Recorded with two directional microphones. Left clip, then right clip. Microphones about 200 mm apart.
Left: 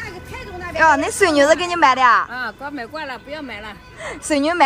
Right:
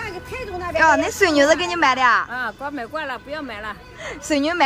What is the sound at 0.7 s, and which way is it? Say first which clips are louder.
A woman's voice: left 1 dB; centre (ahead or behind).